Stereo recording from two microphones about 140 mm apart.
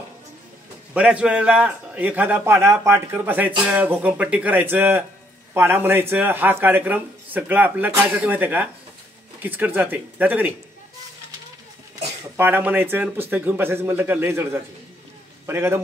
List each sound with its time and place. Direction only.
0.9 s a man's voice: 10° right (ahead or behind)
12.4 s a man's voice: 15° right (ahead or behind)